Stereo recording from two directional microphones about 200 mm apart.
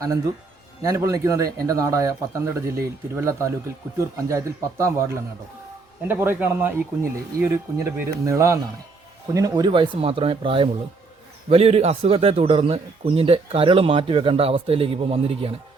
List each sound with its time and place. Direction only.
0.8 s a man's voice: 15° right (ahead or behind)